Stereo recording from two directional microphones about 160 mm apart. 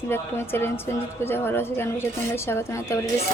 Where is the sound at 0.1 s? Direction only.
15° left (ahead or behind).